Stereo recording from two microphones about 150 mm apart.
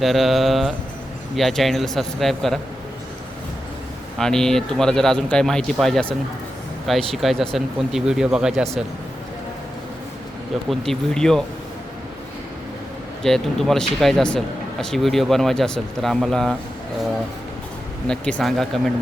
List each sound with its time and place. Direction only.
0.0 s speech: centre (ahead or behind)
4.2 s speech: 5° left (ahead or behind)
10.7 s speech: 5° left (ahead or behind)
13.2 s speech: centre (ahead or behind)
18.1 s speech: 5° left (ahead or behind)